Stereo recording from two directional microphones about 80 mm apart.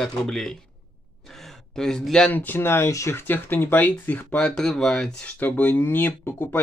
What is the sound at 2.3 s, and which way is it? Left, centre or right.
Speech, left.